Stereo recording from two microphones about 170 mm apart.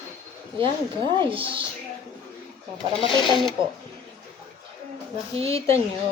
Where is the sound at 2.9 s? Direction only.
30° left (ahead or behind).